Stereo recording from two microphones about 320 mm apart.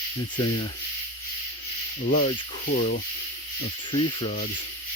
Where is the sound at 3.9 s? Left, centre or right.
Centre.